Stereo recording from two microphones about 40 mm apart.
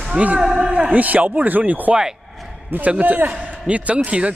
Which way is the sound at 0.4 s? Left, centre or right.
Centre.